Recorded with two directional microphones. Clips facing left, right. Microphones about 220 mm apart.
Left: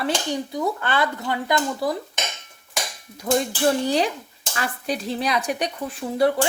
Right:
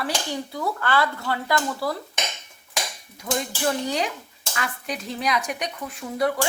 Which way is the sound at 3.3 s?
40° left (ahead or behind).